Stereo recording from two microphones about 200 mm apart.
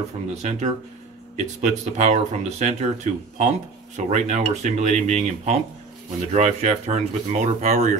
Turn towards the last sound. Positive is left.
turn(degrees=-35)  # may be behind; listen again after turning